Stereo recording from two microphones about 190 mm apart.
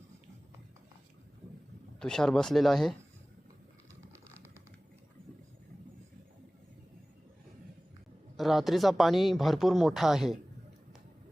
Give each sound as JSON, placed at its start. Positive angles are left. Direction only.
{"t": 2.0, "sound": "speech", "side_deg": 5}
{"t": 8.4, "sound": "speech", "side_deg": 0}